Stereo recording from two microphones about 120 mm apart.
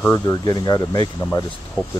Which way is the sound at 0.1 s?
35° left (ahead or behind).